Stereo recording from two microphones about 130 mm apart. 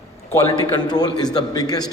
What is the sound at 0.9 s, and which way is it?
A man's voice, 30° left (ahead or behind).